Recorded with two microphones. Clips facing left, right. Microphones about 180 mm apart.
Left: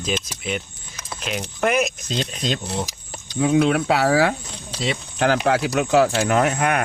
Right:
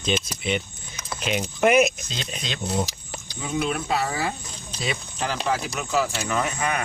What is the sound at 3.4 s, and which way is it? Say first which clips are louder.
Speech: left 9 dB; 90° left.